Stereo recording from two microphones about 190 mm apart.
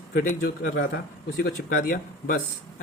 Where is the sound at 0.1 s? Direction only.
50° left (ahead or behind).